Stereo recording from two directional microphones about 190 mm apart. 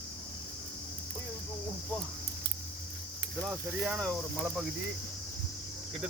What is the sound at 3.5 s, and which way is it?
Speech, 5° right (ahead or behind).